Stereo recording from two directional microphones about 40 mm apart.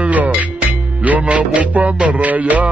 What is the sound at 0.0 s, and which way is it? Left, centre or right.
Music, right.